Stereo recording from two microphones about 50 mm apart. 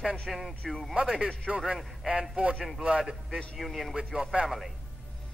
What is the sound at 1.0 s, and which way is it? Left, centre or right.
Speech, centre.